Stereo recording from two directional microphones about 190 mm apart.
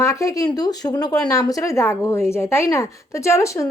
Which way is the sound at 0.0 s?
15° left (ahead or behind).